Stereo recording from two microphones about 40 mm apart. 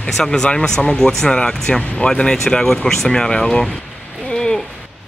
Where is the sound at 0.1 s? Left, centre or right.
Centre.